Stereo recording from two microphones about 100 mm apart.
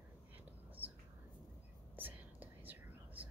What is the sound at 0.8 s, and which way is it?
Whispering, 20° right (ahead or behind).